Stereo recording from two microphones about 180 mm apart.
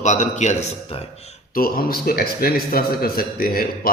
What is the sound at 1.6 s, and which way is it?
A man's voice, 55° left (ahead or behind).